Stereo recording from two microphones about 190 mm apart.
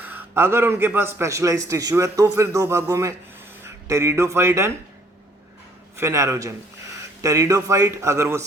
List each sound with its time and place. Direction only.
0.0 s a man's voice: 10° right (ahead or behind)
6.0 s a man's voice: 15° right (ahead or behind)